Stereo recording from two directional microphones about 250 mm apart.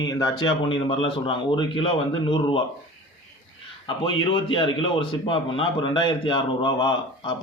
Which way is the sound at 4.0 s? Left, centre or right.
Left.